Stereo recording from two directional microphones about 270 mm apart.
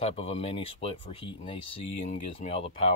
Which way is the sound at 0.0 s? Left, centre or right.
Left.